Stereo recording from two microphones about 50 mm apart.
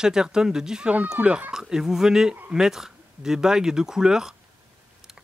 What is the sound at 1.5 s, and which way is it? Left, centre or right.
Speech, centre.